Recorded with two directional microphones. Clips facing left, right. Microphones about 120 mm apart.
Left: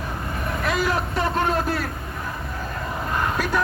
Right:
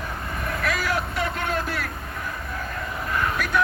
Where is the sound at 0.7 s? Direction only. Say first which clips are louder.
Left 3 dB; 30° left (ahead or behind).